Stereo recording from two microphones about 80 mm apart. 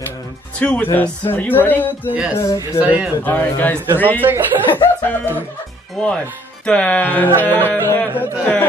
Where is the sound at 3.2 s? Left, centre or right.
Left.